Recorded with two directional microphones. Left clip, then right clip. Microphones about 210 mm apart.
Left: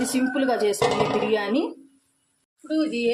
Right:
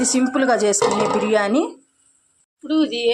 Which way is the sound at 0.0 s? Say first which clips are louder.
Right 5 dB; 20° right (ahead or behind).